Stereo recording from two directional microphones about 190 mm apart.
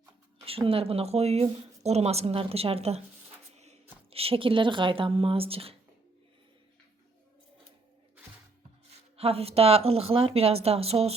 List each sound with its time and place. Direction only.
0.4 s speech: 30° right (ahead or behind)
4.1 s speech: 30° right (ahead or behind)
9.1 s speech: 30° right (ahead or behind)